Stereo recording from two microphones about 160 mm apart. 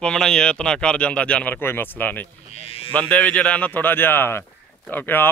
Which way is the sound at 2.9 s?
10° left (ahead or behind).